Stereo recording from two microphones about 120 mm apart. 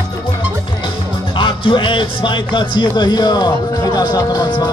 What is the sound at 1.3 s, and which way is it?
Speech, 40° left (ahead or behind).